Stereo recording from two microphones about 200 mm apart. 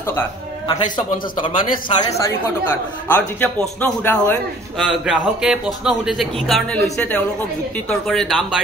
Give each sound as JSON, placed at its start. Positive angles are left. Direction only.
{"t": 1.4, "sound": "a man's voice", "side_deg": 25}
{"t": 3.1, "sound": "a man's voice", "side_deg": 10}